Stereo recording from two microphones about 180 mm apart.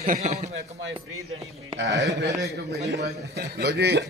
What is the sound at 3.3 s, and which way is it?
Speech, 65° right (ahead or behind).